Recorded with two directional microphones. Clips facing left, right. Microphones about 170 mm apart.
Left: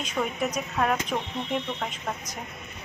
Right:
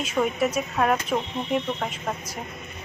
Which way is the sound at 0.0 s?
5° right (ahead or behind).